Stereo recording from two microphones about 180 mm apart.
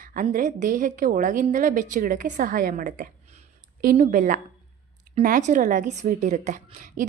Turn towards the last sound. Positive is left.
turn(degrees=-45)  # may be behind; listen again after turning